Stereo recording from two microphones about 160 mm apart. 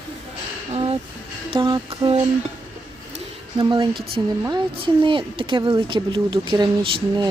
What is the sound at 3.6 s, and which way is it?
Speech, 30° right (ahead or behind).